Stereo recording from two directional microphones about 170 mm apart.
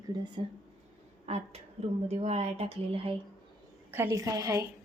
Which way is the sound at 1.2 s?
40° right (ahead or behind).